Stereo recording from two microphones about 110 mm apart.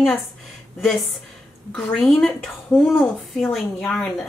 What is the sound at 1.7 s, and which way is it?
A woman's voice, 5° left (ahead or behind).